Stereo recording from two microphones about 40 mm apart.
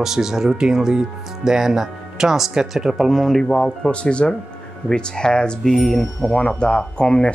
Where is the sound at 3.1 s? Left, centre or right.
Centre.